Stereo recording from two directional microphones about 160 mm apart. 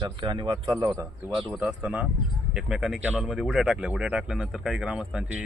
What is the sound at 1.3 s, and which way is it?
Speech, centre (ahead or behind).